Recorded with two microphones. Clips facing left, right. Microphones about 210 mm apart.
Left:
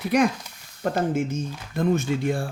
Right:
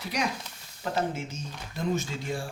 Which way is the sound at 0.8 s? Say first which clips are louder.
Left 7 dB; 50° left (ahead or behind).